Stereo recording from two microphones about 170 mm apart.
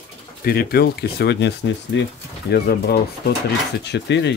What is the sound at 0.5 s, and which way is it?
Speech, 65° left (ahead or behind).